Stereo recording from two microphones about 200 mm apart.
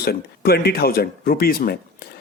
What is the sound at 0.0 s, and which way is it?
A man's voice, 50° left (ahead or behind).